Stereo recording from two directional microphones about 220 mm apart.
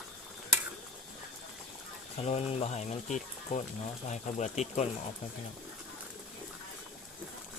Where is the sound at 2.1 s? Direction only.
30° left (ahead or behind).